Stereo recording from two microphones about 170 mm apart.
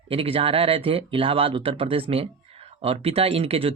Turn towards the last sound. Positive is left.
turn(degrees=-35)  # may be behind; listen again after turning